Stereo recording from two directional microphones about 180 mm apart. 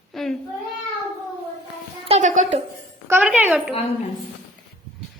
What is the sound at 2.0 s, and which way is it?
Speech, 40° right (ahead or behind).